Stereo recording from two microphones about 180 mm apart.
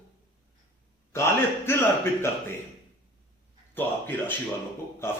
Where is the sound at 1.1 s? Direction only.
15° left (ahead or behind).